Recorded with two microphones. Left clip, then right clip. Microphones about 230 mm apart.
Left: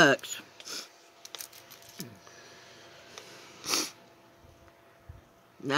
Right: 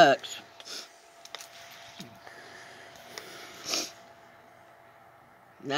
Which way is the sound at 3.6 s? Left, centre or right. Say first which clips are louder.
Left 2 dB; left.